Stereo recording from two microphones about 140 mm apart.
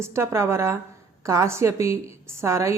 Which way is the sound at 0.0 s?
20° right (ahead or behind).